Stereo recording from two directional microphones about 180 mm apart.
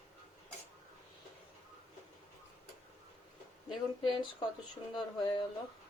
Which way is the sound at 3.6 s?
25° left (ahead or behind).